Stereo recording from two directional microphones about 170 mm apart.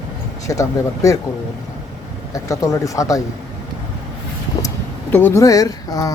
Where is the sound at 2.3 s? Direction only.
20° left (ahead or behind).